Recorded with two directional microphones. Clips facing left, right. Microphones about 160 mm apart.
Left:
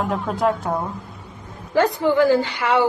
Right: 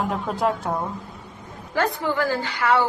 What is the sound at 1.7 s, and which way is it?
A woman's voice, 20° left (ahead or behind).